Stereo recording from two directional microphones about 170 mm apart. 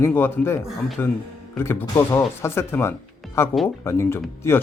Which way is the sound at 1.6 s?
15° left (ahead or behind).